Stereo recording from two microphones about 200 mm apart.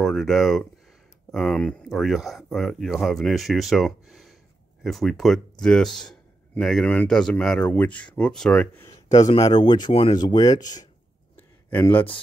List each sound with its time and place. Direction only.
0.0 s speech: centre (ahead or behind)
9.4 s speech: 20° left (ahead or behind)
11.3 s a sound: 10° left (ahead or behind)